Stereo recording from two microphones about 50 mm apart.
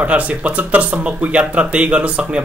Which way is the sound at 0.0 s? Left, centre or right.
Right.